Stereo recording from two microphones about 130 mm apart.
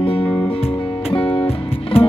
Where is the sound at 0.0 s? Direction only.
45° left (ahead or behind).